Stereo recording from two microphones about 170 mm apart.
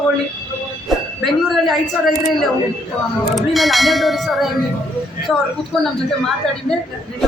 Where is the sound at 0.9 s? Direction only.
Centre (ahead or behind).